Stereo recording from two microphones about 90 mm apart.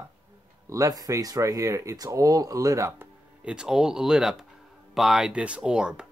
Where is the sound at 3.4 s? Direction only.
10° right (ahead or behind).